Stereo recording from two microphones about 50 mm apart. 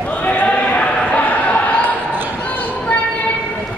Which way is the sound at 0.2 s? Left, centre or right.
Left.